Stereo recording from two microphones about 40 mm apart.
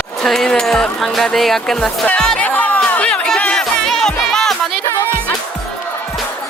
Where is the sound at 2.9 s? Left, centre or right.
Left.